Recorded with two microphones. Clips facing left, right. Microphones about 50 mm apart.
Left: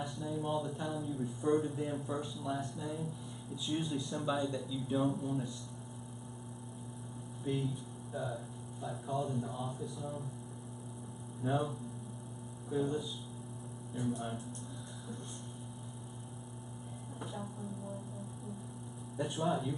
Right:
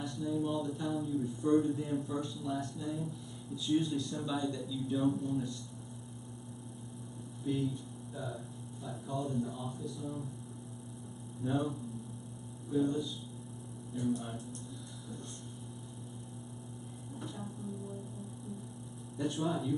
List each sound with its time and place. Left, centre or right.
0.0 s mantra: centre
0.8 s a man's voice: centre; by 5.0 s left
5.0 s a man's voice: centre
7.4 s a man's voice: centre
9.6 s mantra: left
9.9 s a man's voice: centre
11.4 s a man's voice: centre
12.7 s a man's voice: centre
13.9 s a man's voice: centre
19.1 s a man's voice: centre